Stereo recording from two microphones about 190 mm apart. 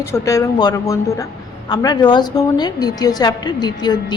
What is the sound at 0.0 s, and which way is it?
A woman's voice, 15° left (ahead or behind).